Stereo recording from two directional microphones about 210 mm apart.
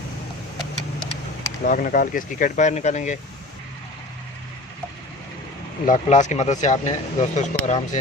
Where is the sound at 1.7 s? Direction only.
40° left (ahead or behind).